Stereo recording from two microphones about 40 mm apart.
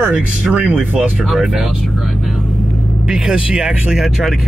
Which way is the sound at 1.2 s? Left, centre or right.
Centre.